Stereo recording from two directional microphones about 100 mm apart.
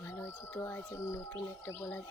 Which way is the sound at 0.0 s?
25° left (ahead or behind).